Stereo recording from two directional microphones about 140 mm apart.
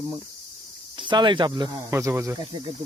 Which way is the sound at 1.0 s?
35° right (ahead or behind).